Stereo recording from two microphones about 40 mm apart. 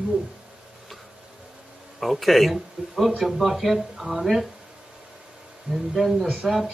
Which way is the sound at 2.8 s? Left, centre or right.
Right.